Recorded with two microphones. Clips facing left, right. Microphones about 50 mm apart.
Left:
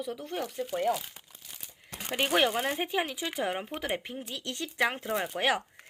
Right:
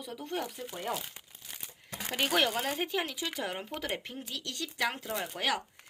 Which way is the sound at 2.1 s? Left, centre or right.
Centre.